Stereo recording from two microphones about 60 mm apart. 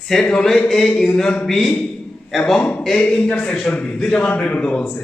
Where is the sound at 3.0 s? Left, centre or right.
Left.